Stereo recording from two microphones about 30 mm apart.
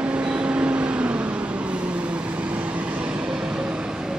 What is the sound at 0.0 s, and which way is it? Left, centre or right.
Vehicle, right.